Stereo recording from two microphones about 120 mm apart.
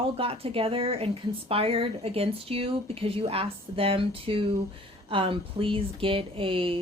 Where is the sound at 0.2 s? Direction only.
50° right (ahead or behind).